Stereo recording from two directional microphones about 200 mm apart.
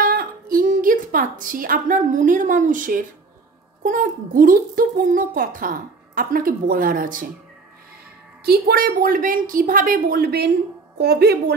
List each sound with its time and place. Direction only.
0.0 s a woman's voice: 50° right (ahead or behind)
8.5 s a woman's voice: 50° right (ahead or behind)